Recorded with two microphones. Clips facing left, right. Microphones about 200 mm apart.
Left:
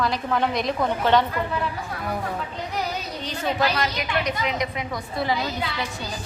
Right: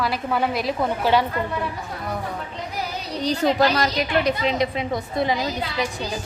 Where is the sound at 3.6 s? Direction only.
35° right (ahead or behind); by 5.5 s 20° right (ahead or behind).